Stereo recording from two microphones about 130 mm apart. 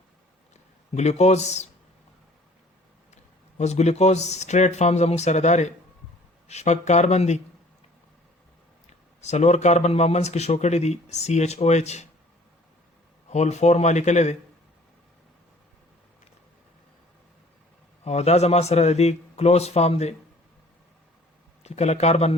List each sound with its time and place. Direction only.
0.9 s speech: 55° left (ahead or behind)
3.6 s speech: 60° left (ahead or behind)
9.2 s speech: 60° left (ahead or behind)
13.3 s speech: 60° left (ahead or behind)
18.0 s speech: 55° left (ahead or behind)
21.6 s speech: 55° left (ahead or behind)